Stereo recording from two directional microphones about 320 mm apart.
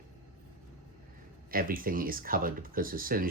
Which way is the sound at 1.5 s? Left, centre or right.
Right.